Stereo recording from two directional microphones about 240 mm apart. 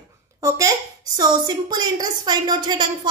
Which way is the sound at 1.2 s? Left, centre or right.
Centre.